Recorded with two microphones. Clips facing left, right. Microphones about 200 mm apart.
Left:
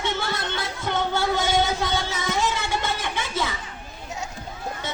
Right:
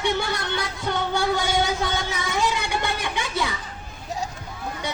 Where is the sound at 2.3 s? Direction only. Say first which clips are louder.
Right 2 dB; 15° right (ahead or behind).